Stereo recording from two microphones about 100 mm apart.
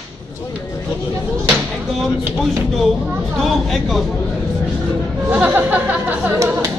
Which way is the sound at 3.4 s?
Centre (ahead or behind).